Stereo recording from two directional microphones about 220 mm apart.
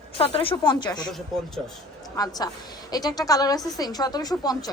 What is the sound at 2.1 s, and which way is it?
A woman's voice, 15° left (ahead or behind).